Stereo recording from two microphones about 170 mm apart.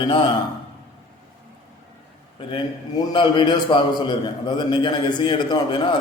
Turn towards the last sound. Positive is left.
turn(degrees=30)  # may be behind; listen again after turning